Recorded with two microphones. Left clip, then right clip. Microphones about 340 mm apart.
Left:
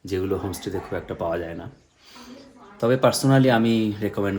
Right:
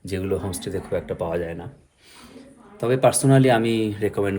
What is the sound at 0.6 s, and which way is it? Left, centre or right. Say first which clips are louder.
Speech: right 2 dB; centre.